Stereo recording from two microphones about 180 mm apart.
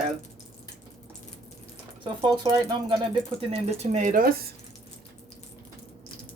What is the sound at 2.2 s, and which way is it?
Speech, 25° right (ahead or behind).